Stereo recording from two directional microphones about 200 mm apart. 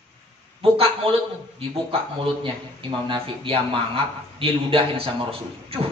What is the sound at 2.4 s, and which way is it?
A man's voice, 25° right (ahead or behind).